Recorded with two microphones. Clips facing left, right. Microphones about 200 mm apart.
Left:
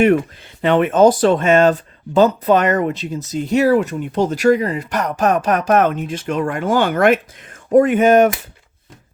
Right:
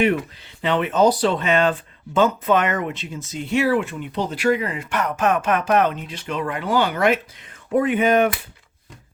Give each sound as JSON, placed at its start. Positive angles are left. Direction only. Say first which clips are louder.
{"t": 0.0, "sound": "speech", "louder": "left 6 dB", "side_deg": 50}